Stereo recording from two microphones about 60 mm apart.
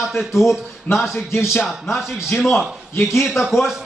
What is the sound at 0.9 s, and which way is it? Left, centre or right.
Speech, left.